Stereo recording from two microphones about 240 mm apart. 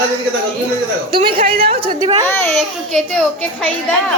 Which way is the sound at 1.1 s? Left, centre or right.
Right.